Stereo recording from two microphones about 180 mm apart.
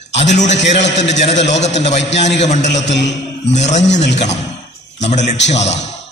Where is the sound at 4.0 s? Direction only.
75° left (ahead or behind).